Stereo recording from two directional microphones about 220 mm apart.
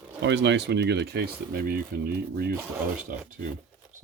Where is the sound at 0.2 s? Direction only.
55° right (ahead or behind).